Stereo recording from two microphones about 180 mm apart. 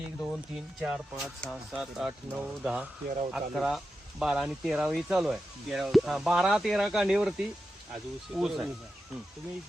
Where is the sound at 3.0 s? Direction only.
35° right (ahead or behind).